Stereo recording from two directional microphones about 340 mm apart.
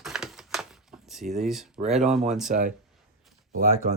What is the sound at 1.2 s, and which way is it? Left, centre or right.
Speech, right.